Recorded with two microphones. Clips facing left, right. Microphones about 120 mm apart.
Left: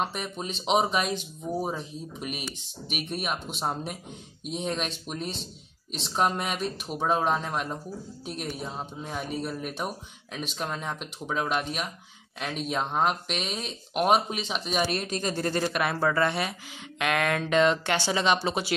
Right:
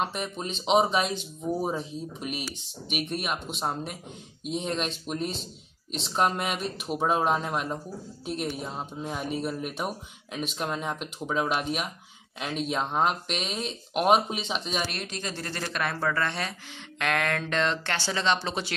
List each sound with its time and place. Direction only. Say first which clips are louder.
0.0 s speech: right 1 dB; centre (ahead or behind)
14.9 s speech: left 6 dB; 40° left (ahead or behind)
15.5 s speech: left 4 dB; 10° left (ahead or behind)